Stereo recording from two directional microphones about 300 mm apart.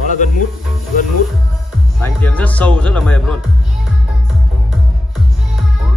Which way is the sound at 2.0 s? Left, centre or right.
Centre.